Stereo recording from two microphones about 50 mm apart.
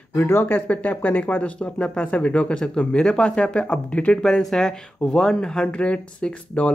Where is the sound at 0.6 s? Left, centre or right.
Left.